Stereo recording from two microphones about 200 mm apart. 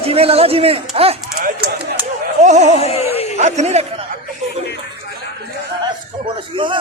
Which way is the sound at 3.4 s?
35° right (ahead or behind).